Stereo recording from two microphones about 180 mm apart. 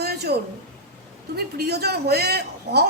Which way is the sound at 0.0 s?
65° right (ahead or behind).